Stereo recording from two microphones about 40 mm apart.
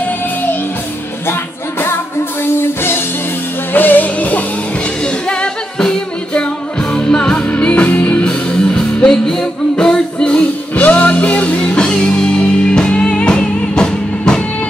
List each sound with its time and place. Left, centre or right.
0.0 s music: left
1.2 s music: left
3.7 s music: left
5.0 s music: left
7.4 s music: left
7.9 s music: left
8.2 s music: left
10.7 s music: left